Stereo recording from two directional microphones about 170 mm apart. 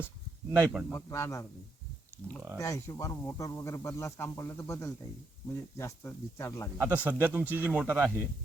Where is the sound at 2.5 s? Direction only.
15° left (ahead or behind).